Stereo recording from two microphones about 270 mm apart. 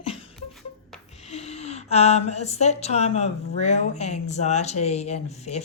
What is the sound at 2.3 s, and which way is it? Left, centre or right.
Speech, left.